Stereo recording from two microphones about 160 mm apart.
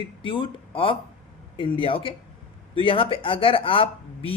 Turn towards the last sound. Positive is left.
turn(degrees=35)  # may be behind; listen again after turning